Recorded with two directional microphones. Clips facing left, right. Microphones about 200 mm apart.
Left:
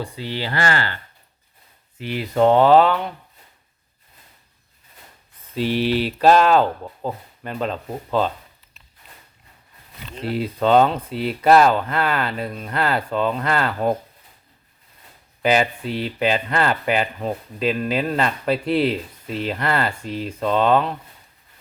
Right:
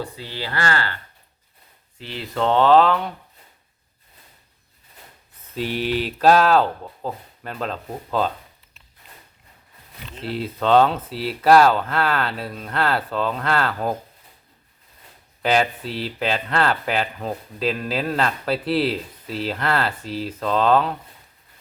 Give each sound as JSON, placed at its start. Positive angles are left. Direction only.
{"t": 0.2, "sound": "speech", "side_deg": 20}
{"t": 2.0, "sound": "speech", "side_deg": 15}
{"t": 5.6, "sound": "speech", "side_deg": 40}
{"t": 6.3, "sound": "speech", "side_deg": 0}
{"t": 10.2, "sound": "speech", "side_deg": 0}
{"t": 15.4, "sound": "speech", "side_deg": 0}